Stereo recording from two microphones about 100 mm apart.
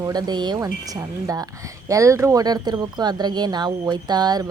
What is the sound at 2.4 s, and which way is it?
A woman's voice, 40° right (ahead or behind).